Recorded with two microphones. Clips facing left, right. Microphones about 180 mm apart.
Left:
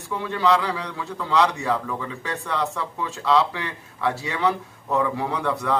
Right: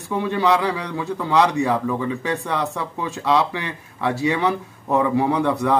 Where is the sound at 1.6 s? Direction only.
15° right (ahead or behind).